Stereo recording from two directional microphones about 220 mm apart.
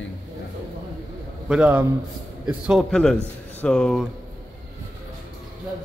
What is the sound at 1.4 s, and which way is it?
A man's voice, 5° right (ahead or behind).